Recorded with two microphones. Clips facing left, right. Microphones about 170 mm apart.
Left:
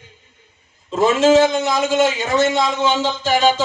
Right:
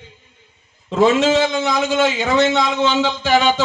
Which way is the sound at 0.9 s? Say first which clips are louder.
Left 1 dB; 60° right (ahead or behind).